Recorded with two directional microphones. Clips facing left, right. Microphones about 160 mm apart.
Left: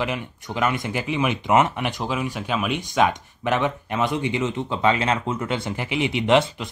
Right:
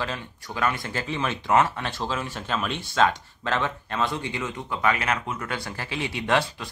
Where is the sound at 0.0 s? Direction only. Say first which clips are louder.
Left 5 dB; 15° left (ahead or behind).